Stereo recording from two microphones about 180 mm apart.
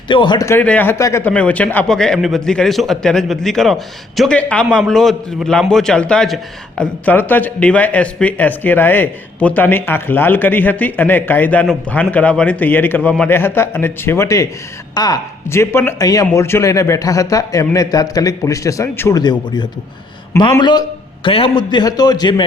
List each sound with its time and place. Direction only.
0.1 s a man's voice: 25° left (ahead or behind)